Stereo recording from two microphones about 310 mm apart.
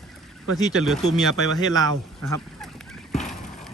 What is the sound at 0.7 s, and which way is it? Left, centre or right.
Speech, centre.